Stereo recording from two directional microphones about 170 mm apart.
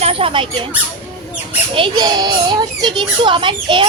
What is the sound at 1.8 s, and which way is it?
Speech, 25° right (ahead or behind).